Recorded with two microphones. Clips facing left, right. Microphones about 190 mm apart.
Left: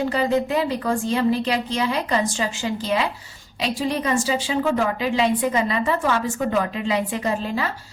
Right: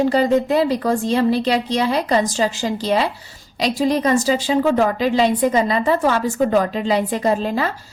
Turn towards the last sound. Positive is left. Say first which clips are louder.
# right 5 dB
turn(degrees=-40)  # may be behind; listen again after turning